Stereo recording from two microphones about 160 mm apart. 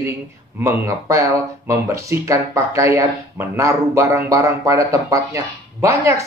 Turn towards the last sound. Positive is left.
turn(degrees=-20)  # may be behind; listen again after turning